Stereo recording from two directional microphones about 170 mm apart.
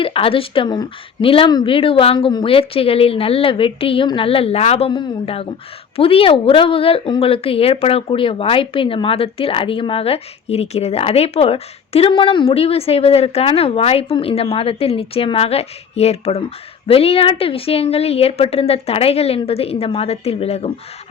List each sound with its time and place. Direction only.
0.0 s speech: 30° left (ahead or behind)